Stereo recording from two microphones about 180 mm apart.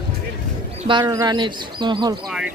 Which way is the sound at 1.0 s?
20° right (ahead or behind).